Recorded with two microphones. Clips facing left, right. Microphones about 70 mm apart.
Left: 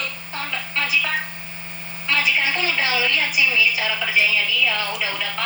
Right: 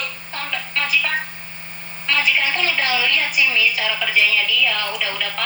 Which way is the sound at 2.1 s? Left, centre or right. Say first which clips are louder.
Right 1 dB; right.